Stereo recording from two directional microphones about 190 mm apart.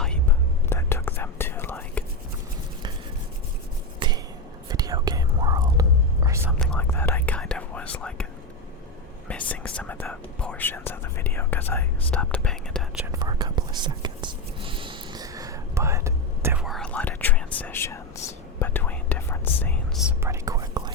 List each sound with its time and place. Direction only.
0.0 s whispering: 10° left (ahead or behind)
4.0 s a sound: 25° right (ahead or behind)
4.7 s whispering: 20° right (ahead or behind)
6.6 s whispering: 5° left (ahead or behind)
13.1 s whispering: 20° right (ahead or behind)
16.6 s whispering: 5° left (ahead or behind)
20.1 s whispering: 15° right (ahead or behind)